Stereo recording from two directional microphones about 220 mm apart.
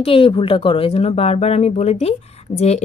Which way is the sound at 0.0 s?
25° left (ahead or behind).